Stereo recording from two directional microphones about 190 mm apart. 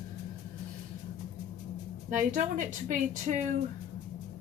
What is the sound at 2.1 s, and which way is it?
A woman's voice, 40° right (ahead or behind).